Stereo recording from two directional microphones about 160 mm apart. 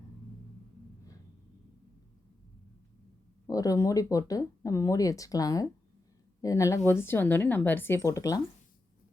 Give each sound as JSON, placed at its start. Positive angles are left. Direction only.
{"t": 3.4, "sound": "speech", "side_deg": 20}